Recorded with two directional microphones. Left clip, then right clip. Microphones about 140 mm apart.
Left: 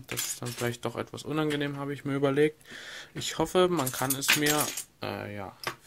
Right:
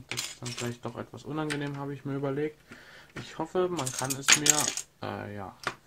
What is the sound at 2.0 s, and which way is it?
Speech, 25° left (ahead or behind).